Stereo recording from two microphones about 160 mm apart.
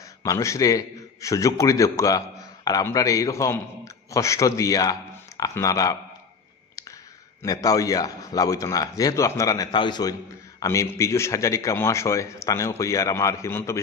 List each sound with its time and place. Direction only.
0.2 s a man's voice: 20° left (ahead or behind)
7.6 s a man's voice: 20° left (ahead or behind)